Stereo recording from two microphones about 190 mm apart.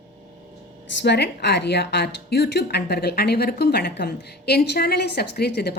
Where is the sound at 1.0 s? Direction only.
60° left (ahead or behind).